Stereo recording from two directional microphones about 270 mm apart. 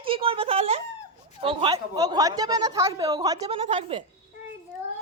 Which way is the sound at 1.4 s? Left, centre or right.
Centre.